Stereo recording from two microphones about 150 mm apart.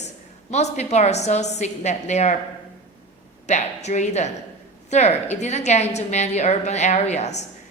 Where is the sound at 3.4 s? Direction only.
50° left (ahead or behind).